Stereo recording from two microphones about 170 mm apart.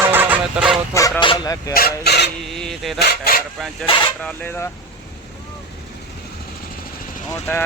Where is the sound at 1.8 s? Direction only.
70° left (ahead or behind).